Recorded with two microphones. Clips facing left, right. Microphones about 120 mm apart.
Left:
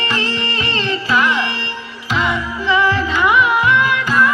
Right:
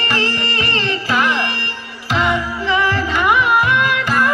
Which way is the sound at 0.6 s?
60° right (ahead or behind).